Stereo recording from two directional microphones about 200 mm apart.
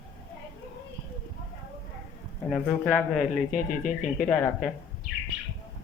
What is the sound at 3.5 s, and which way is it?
Speech, 40° left (ahead or behind).